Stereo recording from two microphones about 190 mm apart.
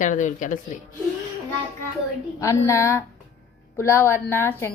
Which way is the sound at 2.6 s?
15° left (ahead or behind).